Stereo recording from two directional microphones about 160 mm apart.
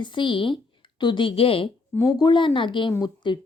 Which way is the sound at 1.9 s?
25° left (ahead or behind).